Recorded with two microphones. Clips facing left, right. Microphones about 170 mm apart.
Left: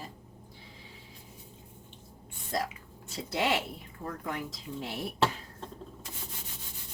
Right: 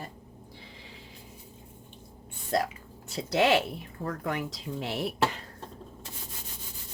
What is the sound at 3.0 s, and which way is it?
Speech, 80° right.